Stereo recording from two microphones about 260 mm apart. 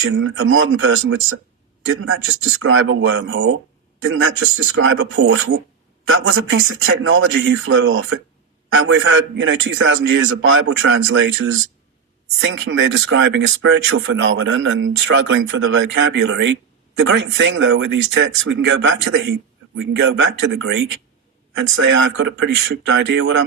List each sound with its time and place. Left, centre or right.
0.0 s speech: right